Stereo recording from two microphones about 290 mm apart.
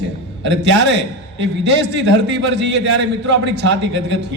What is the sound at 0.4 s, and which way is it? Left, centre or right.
A man's voice, right.